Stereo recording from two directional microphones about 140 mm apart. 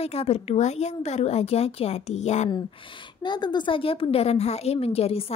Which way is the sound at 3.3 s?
30° left (ahead or behind).